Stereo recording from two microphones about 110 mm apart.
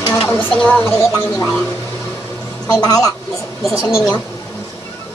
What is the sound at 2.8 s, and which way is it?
Speech, 35° left (ahead or behind).